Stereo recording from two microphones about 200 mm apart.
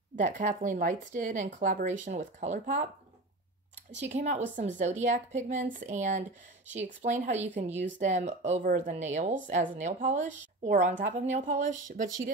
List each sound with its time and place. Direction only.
0.1 s speech: 40° right (ahead or behind)
4.1 s speech: 35° right (ahead or behind)